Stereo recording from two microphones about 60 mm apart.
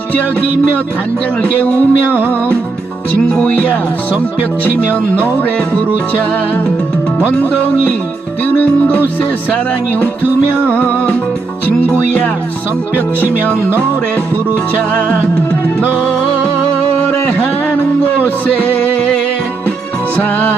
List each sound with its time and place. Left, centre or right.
1.4 s music: left
3.2 s music: centre
5.4 s music: left
7.3 s music: left
11.9 s speech: left
17.2 s music: left
20.1 s speech: left